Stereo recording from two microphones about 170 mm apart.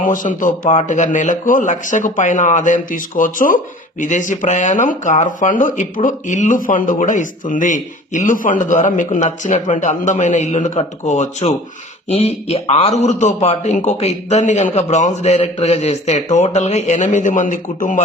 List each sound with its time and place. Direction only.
0.0 s a man's voice: 50° left (ahead or behind)